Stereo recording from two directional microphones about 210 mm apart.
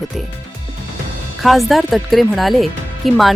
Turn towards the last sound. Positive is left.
turn(degrees=0)  # may be behind; listen again after turning